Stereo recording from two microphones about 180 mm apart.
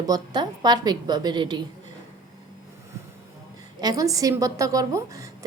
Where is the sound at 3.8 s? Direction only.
20° right (ahead or behind).